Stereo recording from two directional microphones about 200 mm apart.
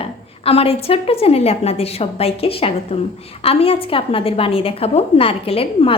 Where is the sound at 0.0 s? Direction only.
30° left (ahead or behind).